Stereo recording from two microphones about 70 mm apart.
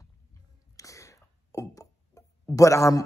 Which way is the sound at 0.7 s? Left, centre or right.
Left.